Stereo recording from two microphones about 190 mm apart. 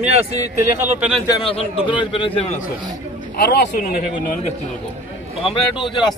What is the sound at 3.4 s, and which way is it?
Speech, 55° left (ahead or behind).